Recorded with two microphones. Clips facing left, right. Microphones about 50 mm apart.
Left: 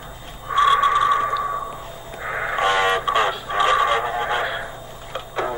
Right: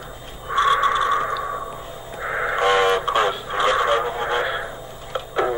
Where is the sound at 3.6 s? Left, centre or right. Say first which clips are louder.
Left 1 dB; left.